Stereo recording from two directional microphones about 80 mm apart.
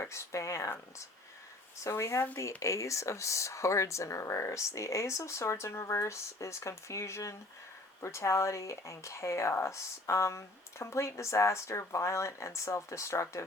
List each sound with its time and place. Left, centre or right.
0.0 s speech: left